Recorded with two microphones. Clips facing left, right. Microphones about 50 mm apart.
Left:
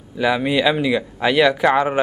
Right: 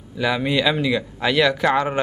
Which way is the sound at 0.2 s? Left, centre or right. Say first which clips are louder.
Left 3 dB; centre.